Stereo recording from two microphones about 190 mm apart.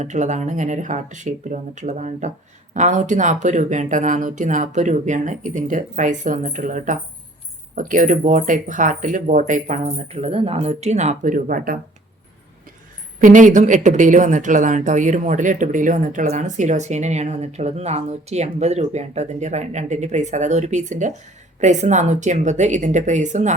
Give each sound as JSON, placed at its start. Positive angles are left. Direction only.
{"t": 0.0, "sound": "speech", "side_deg": -40}
{"t": 13.1, "sound": "speech", "side_deg": -45}